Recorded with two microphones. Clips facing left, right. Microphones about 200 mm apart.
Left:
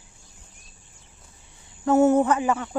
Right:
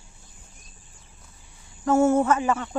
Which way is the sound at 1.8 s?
20° left (ahead or behind).